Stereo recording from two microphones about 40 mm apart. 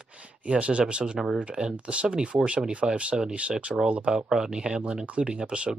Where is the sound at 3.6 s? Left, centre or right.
Right.